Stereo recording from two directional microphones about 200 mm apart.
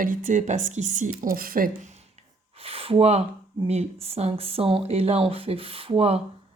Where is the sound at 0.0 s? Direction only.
40° right (ahead or behind).